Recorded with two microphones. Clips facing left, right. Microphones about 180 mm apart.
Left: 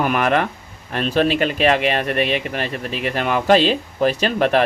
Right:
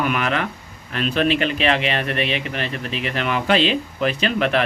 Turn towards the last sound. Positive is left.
turn(degrees=45)  # may be behind; listen again after turning